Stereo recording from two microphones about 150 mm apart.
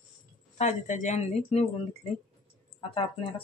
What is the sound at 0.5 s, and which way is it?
Speech, 55° left (ahead or behind).